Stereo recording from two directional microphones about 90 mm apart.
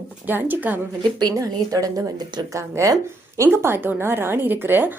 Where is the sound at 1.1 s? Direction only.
45° right (ahead or behind).